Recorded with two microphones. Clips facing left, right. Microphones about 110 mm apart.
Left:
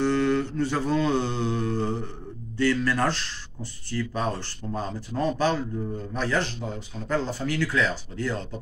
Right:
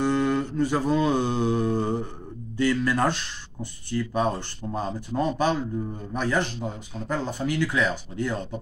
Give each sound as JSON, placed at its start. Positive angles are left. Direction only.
{"t": 0.0, "sound": "mantra", "side_deg": -10}
{"t": 2.5, "sound": "speech", "side_deg": -15}